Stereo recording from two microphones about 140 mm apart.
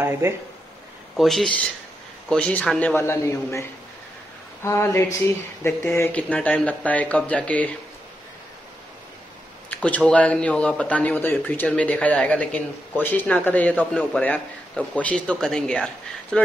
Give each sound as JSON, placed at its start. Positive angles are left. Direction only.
{"t": 1.1, "sound": "speech", "side_deg": 0}
{"t": 4.6, "sound": "speech", "side_deg": 20}
{"t": 9.7, "sound": "speech", "side_deg": 10}